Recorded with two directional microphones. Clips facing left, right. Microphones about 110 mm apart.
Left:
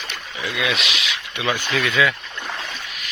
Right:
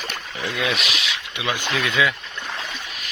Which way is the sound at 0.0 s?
45° right (ahead or behind).